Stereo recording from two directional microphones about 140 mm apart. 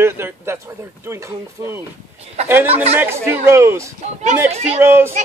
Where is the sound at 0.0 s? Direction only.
15° right (ahead or behind).